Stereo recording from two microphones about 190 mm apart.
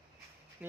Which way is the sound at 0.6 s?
5° right (ahead or behind).